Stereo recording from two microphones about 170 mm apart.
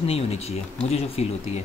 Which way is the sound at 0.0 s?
35° left (ahead or behind).